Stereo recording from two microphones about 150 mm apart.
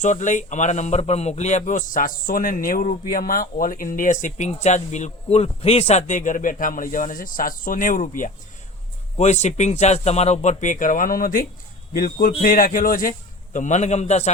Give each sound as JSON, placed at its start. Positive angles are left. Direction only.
{"t": 0.0, "sound": "speech", "side_deg": 55}
{"t": 9.1, "sound": "a man's voice", "side_deg": 50}